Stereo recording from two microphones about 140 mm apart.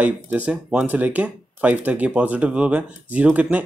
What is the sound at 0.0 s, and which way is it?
Speech, 10° right (ahead or behind).